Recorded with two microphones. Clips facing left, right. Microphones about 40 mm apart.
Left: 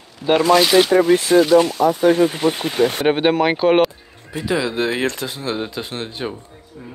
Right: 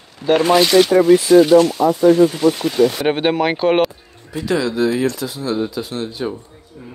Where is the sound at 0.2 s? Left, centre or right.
Right.